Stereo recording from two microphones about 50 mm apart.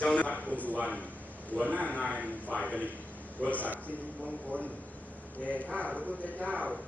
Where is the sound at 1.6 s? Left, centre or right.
Left.